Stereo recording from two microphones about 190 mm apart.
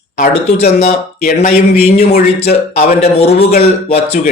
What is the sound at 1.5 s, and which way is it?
Speech, 35° left (ahead or behind).